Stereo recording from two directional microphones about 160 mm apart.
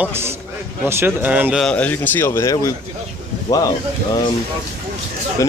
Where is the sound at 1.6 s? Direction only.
10° left (ahead or behind).